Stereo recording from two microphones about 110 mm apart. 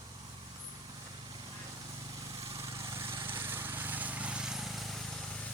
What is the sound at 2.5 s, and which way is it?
Vehicle, 30° right (ahead or behind).